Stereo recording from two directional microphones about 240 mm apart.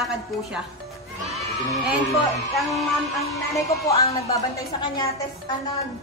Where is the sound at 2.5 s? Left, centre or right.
Centre.